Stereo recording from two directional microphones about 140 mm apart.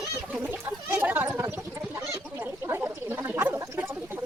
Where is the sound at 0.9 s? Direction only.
15° right (ahead or behind).